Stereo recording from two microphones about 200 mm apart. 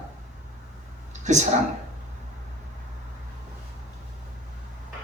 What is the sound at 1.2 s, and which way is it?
Speech, 35° right (ahead or behind).